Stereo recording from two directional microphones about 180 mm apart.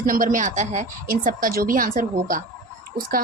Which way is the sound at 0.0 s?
50° right (ahead or behind).